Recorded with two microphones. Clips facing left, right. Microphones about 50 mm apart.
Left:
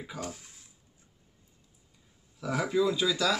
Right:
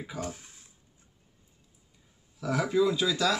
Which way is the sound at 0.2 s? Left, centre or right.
Right.